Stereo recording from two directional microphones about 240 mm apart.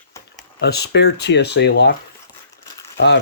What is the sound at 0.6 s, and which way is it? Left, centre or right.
Speech, left.